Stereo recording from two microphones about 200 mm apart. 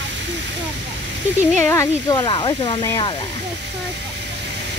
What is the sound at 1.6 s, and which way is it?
Speech, 15° left (ahead or behind).